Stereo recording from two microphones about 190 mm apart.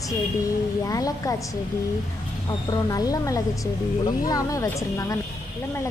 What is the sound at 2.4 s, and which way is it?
A woman's voice, 20° left (ahead or behind).